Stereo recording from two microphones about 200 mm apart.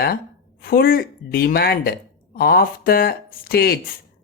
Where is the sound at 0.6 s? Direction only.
45° left (ahead or behind).